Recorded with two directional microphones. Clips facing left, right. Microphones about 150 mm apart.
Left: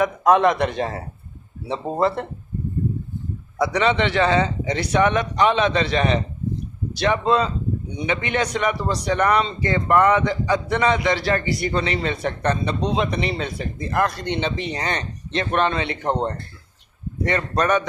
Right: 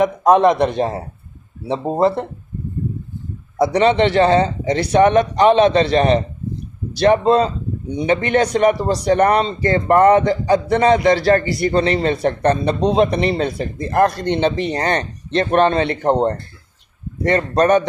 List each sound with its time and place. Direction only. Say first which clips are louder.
0.2 s speech: right 4 dB; 30° right (ahead or behind)
3.6 s a man's voice: right 6 dB; 40° right (ahead or behind)